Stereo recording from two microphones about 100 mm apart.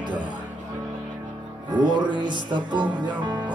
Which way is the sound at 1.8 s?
50° right (ahead or behind).